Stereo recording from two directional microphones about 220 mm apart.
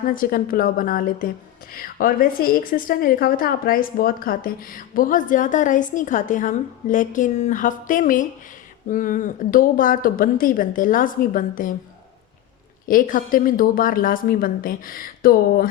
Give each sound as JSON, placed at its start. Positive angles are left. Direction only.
{"t": 0.0, "sound": "a woman's voice", "side_deg": 40}
{"t": 12.8, "sound": "a woman's voice", "side_deg": 40}